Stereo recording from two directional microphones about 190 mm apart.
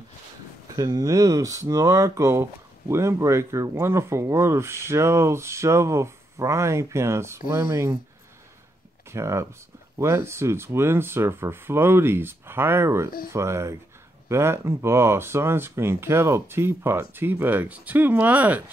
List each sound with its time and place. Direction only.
0.7 s speech: 20° right (ahead or behind)
9.1 s speech: 15° right (ahead or behind)